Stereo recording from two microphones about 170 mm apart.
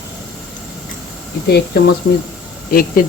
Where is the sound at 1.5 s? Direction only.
70° left (ahead or behind).